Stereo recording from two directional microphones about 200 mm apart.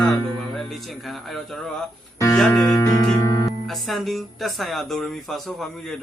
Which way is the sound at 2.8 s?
15° left (ahead or behind).